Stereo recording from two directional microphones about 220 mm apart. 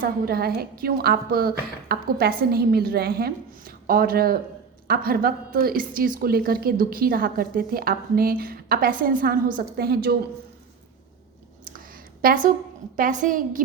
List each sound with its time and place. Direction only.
0.0 s a woman's voice: 45° right (ahead or behind)
11.6 s a sound: 40° right (ahead or behind)
13.0 s a woman's voice: 35° right (ahead or behind)